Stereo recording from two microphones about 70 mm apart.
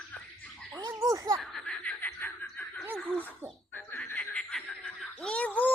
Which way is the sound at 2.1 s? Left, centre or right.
Left.